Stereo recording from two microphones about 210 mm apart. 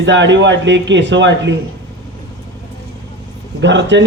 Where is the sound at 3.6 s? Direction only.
60° right (ahead or behind).